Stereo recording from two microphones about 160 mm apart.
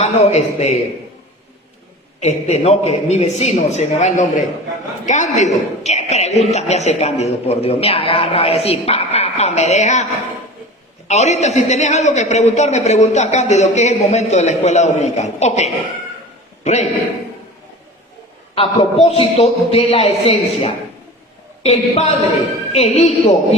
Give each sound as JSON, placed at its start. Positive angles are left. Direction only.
{"t": 0.0, "sound": "a man's voice", "side_deg": 45}
{"t": 2.2, "sound": "a man's voice", "side_deg": 45}
{"t": 11.1, "sound": "a man's voice", "side_deg": 45}
{"t": 18.5, "sound": "a man's voice", "side_deg": 35}